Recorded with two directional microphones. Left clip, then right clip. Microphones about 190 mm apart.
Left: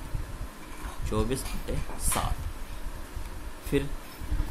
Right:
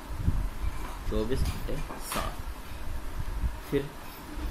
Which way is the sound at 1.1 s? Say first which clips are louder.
Left 2 dB; 55° left (ahead or behind).